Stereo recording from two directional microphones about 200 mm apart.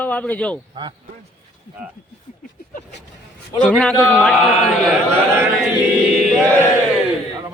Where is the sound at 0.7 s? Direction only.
25° right (ahead or behind).